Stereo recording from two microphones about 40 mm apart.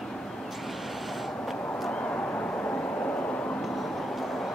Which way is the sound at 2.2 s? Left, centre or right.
Left.